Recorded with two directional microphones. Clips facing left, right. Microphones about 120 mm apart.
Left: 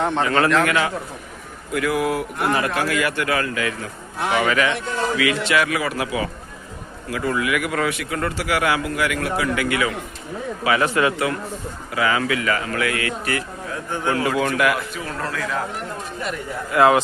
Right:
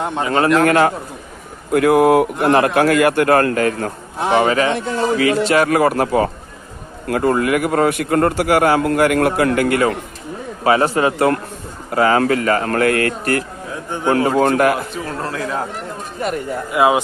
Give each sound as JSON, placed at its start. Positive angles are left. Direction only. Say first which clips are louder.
{"t": 0.0, "sound": "a man's voice", "louder": "left 1 dB", "side_deg": -10}
{"t": 0.3, "sound": "a man's voice", "louder": "right 6 dB", "side_deg": -25}
{"t": 0.6, "sound": "speech", "louder": "right 7 dB", "side_deg": -45}
{"t": 4.2, "sound": "a man's voice", "louder": "right 5 dB", "side_deg": -30}
{"t": 16.7, "sound": "a man's voice", "louder": "even", "side_deg": -15}